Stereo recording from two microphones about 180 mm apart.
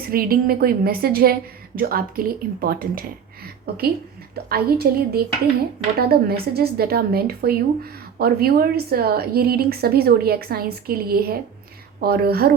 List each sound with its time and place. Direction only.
0.1 s a woman's voice: 55° right (ahead or behind)